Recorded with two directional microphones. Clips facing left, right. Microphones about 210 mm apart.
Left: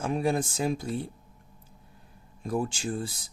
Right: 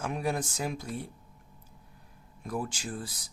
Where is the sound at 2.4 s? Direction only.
30° left (ahead or behind).